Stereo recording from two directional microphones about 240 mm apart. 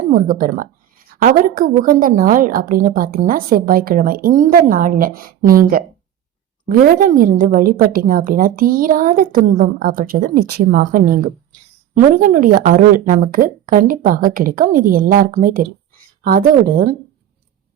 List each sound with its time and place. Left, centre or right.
0.1 s a woman's voice: right
12.2 s a woman's voice: right